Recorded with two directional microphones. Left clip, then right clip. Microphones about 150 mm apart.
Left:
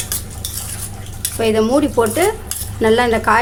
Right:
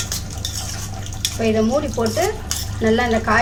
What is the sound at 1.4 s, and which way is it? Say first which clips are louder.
Speech: left 5 dB; 60° left (ahead or behind).